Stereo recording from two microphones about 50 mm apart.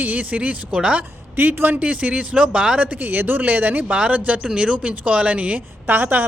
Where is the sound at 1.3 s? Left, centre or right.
Right.